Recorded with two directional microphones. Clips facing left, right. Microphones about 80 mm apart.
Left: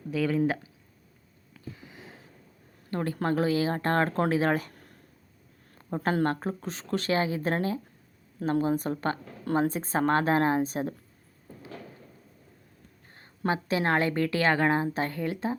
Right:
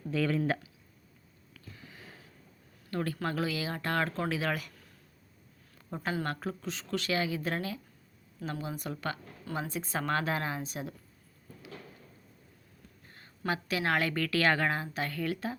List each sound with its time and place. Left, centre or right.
0.1 s speech: centre
1.5 s a sound: centre
2.9 s speech: left
13.1 s a woman's voice: left